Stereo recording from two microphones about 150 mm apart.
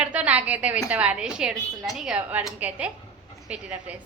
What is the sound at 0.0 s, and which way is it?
A woman's voice, 10° right (ahead or behind).